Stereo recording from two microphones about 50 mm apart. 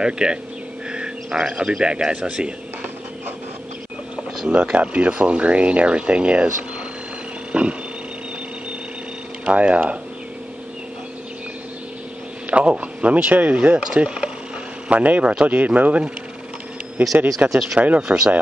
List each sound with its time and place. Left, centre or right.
0.0 s speech: centre
0.9 s a sound: centre
1.5 s speech: centre
4.5 s speech: right
7.5 s a sound: centre
9.5 s speech: right
12.4 s speech: right
13.9 s speech: centre
17.5 s speech: centre
17.7 s speech: right
18.0 s speech: centre